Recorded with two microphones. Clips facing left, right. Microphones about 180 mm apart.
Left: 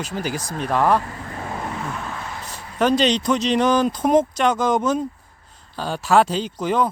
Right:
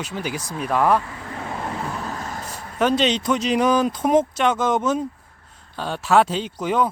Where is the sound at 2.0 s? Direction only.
40° right (ahead or behind).